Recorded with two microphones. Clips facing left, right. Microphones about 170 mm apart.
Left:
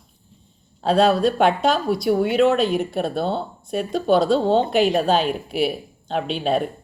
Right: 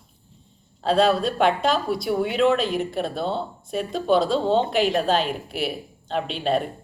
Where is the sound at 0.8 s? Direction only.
Centre (ahead or behind).